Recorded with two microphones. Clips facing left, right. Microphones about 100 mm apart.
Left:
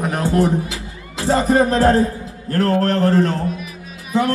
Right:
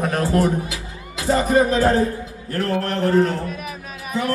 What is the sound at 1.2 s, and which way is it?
Speech, 35° left (ahead or behind).